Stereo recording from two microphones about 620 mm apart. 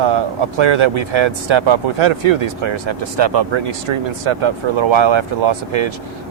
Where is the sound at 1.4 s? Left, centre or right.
Right.